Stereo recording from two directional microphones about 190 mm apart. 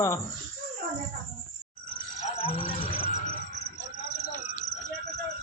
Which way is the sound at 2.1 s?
35° left (ahead or behind).